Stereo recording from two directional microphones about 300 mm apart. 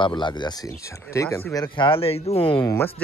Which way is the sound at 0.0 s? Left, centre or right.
Centre.